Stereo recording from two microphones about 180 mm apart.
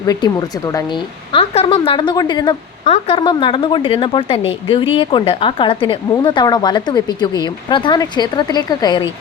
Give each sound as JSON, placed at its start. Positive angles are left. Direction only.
{"t": 0.0, "sound": "a woman's voice", "side_deg": 20}